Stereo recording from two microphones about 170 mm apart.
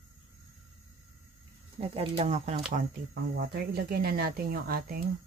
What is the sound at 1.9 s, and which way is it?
Speech, 35° right (ahead or behind).